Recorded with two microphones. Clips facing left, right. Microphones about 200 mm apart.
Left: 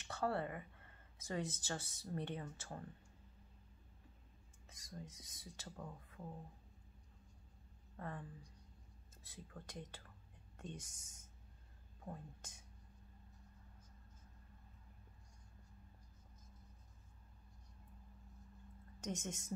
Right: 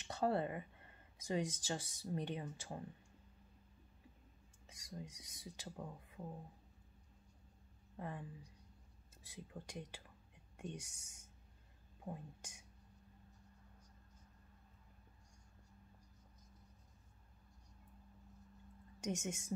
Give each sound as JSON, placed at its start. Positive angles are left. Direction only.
{"t": 0.1, "sound": "speech", "side_deg": -20}
{"t": 4.7, "sound": "speech", "side_deg": -10}
{"t": 8.0, "sound": "speech", "side_deg": -10}
{"t": 9.3, "sound": "speech", "side_deg": -15}
{"t": 12.0, "sound": "speech", "side_deg": -10}
{"t": 18.9, "sound": "speech", "side_deg": -10}